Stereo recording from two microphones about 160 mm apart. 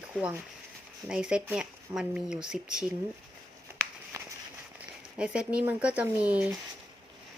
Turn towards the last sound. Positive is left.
turn(degrees=-10)  # may be behind; listen again after turning